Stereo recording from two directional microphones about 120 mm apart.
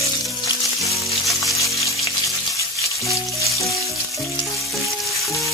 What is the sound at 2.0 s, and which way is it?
Frying, 25° left (ahead or behind).